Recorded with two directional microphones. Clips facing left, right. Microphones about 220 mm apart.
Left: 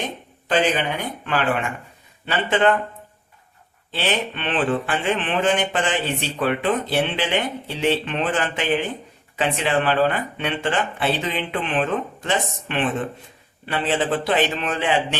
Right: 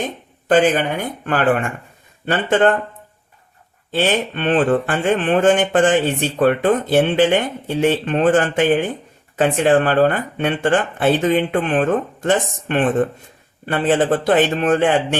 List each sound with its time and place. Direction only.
0.4 s speech: 50° right (ahead or behind)
3.9 s speech: 45° right (ahead or behind)